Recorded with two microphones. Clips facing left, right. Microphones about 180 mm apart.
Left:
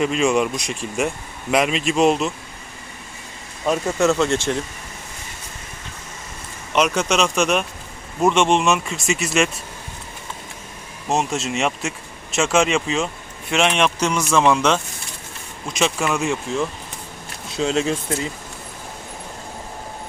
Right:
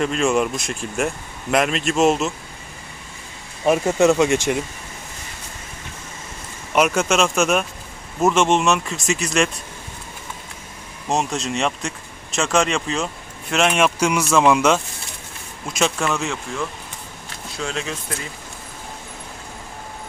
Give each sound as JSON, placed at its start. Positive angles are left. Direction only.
{"t": 0.0, "sound": "speech", "side_deg": 0}
{"t": 3.7, "sound": "speech", "side_deg": -15}
{"t": 6.7, "sound": "speech", "side_deg": -5}
{"t": 11.1, "sound": "speech", "side_deg": 0}
{"t": 15.7, "sound": "speech", "side_deg": 5}
{"t": 17.6, "sound": "speech", "side_deg": 25}